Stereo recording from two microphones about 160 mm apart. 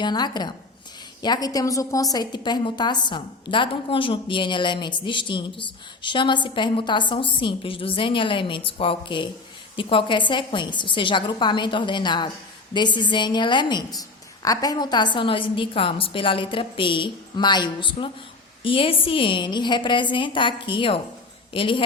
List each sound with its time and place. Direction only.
0.0 s a woman's voice: 25° left (ahead or behind)